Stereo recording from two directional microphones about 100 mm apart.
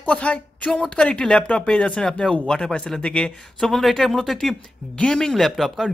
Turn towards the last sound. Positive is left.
turn(degrees=5)  # may be behind; listen again after turning